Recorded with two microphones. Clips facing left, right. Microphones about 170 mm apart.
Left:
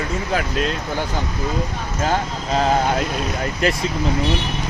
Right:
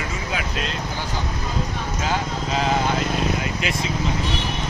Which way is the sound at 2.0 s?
50° left (ahead or behind).